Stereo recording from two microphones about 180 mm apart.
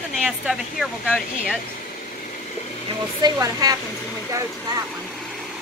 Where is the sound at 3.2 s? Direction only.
20° right (ahead or behind).